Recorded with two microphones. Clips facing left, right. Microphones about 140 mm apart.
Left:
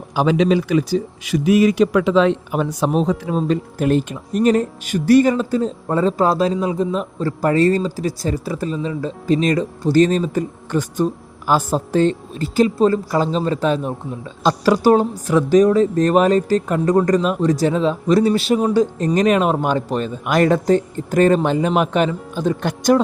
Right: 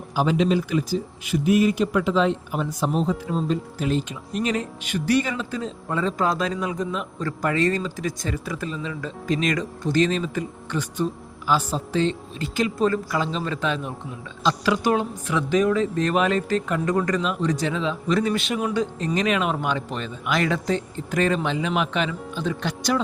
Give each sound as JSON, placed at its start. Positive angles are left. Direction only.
{"t": 0.2, "sound": "speech", "side_deg": 90}
{"t": 3.8, "sound": "speech", "side_deg": 55}